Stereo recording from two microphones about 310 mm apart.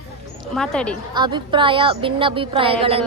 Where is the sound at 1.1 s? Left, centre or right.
Centre.